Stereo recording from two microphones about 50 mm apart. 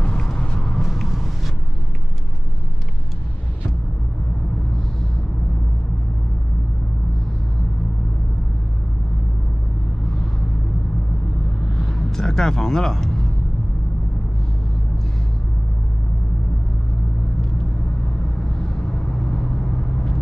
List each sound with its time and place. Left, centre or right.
0.0 s vehicle: centre
0.6 s a sound: centre
11.7 s vehicle: centre
18.6 s vehicle: centre